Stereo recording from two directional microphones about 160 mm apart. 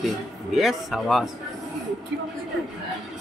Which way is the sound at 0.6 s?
Centre (ahead or behind).